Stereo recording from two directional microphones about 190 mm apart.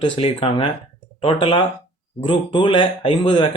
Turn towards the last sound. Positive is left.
turn(degrees=25)  # may be behind; listen again after turning